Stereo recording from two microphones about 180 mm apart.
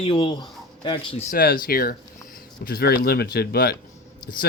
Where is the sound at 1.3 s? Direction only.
55° left (ahead or behind).